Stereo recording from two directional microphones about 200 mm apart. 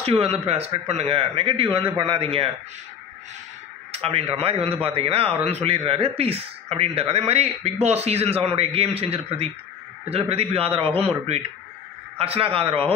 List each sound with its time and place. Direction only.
0.0 s a man's voice: 30° right (ahead or behind)
3.9 s a man's voice: 30° right (ahead or behind)